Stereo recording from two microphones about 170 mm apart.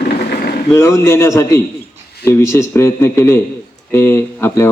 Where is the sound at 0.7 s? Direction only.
15° left (ahead or behind).